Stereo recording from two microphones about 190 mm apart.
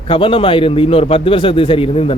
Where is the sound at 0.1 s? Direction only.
25° left (ahead or behind).